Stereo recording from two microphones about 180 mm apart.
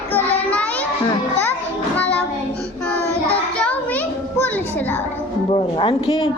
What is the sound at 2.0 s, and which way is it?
Child singing, 10° left (ahead or behind).